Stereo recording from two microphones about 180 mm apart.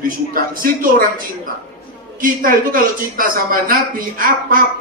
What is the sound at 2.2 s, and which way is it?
Speech, 50° right (ahead or behind).